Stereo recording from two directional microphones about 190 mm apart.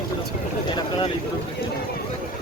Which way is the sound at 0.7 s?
25° left (ahead or behind).